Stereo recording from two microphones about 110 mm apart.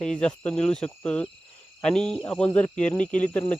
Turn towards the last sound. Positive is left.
turn(degrees=15)  # may be behind; listen again after turning